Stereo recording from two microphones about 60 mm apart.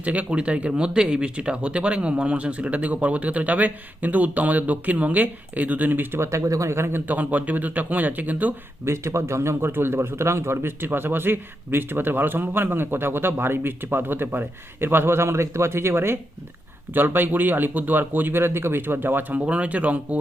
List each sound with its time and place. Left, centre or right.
0.0 s speech: right
6.1 s speech: right
7.0 s speech: right
8.8 s a man's voice: right
16.9 s a man's voice: right
19.4 s speech: right